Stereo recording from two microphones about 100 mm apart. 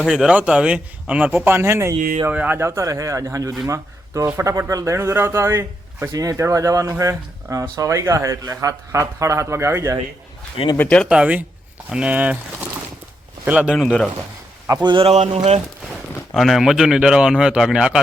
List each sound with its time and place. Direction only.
0.0 s a man's voice: 5° right (ahead or behind); by 2.0 s 30° right (ahead or behind)
2.3 s a man's voice: 15° right (ahead or behind)
10.8 s speech: 10° left (ahead or behind)
11.1 s a man's voice: 10° right (ahead or behind)
13.7 s speech: 5° left (ahead or behind)
14.7 s a man's voice: 45° right (ahead or behind)
16.3 s speech: centre (ahead or behind)